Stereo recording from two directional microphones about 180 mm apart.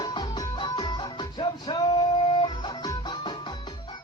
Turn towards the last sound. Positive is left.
turn(degrees=25)  # may be behind; listen again after turning